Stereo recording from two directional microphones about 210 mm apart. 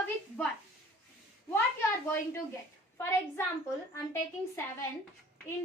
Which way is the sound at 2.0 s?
10° left (ahead or behind).